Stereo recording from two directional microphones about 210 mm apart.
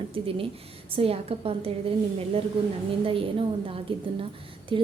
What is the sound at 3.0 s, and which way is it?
A woman's voice, 25° right (ahead or behind).